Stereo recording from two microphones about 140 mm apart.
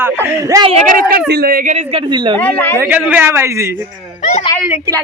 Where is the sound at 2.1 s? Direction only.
35° right (ahead or behind).